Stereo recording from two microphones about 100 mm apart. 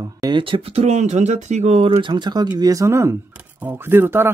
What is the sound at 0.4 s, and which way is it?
Speech, 60° right (ahead or behind).